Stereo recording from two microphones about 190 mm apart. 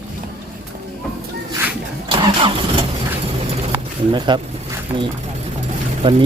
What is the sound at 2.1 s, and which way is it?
Vehicle, 25° right (ahead or behind).